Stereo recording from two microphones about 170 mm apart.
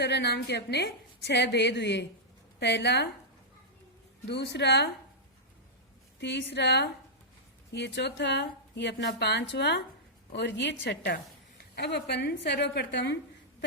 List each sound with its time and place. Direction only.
0.0 s a woman's voice: 80° left
4.3 s a woman's voice: 90° left
6.1 s a woman's voice: 90° left